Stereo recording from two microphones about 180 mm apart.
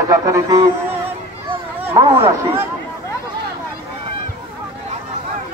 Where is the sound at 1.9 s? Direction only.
15° right (ahead or behind).